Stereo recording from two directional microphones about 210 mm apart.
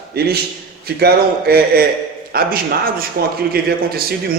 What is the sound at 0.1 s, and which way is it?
A man's voice, 50° right (ahead or behind).